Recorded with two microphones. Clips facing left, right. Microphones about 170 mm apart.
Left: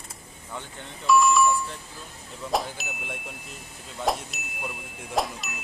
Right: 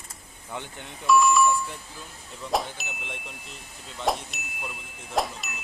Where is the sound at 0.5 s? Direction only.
15° right (ahead or behind).